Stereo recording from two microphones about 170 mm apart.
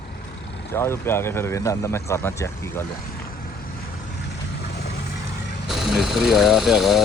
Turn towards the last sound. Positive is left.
turn(degrees=0)  # may be behind; listen again after turning